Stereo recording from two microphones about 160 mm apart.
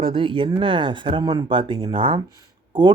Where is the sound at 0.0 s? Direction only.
35° right (ahead or behind).